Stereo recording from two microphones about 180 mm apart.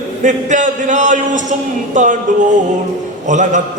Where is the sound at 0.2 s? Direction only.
45° right (ahead or behind).